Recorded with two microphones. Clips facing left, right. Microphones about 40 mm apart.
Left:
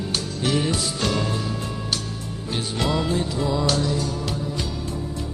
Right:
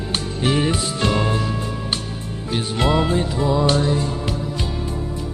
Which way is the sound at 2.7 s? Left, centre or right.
Right.